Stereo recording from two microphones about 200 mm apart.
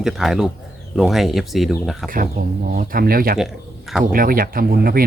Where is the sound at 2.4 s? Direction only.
45° right (ahead or behind).